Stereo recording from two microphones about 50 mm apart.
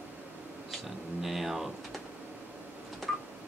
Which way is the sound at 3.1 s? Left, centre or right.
Centre.